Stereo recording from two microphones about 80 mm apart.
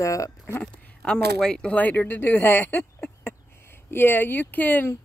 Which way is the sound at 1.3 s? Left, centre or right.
Centre.